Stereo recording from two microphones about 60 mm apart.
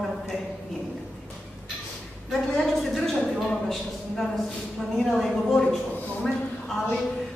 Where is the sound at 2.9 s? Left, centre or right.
Centre.